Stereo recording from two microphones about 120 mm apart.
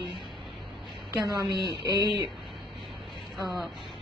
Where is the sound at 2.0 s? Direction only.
40° right (ahead or behind).